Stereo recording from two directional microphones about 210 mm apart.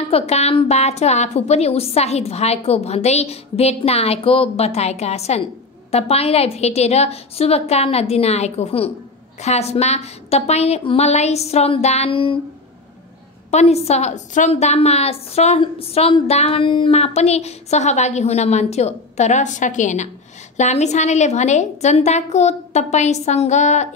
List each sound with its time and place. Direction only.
0.1 s a woman's voice: 30° left (ahead or behind)
13.5 s a woman's voice: 30° left (ahead or behind)